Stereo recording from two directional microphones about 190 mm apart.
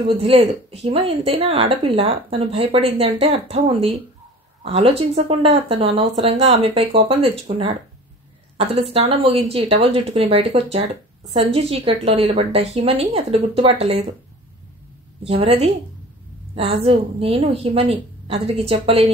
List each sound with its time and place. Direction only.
0.0 s a woman's voice: 30° right (ahead or behind)
15.2 s a woman's voice: 30° right (ahead or behind)